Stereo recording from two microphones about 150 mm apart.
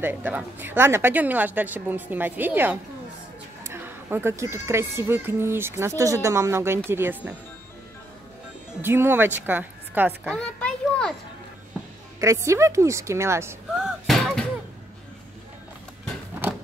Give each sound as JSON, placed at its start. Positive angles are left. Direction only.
{"t": 0.0, "sound": "speech", "side_deg": -10}
{"t": 8.8, "sound": "speech", "side_deg": -15}
{"t": 10.3, "sound": "children playing", "side_deg": 5}
{"t": 12.2, "sound": "a woman's voice", "side_deg": -20}
{"t": 13.7, "sound": "music", "side_deg": -5}
{"t": 16.4, "sound": "a sound", "side_deg": -15}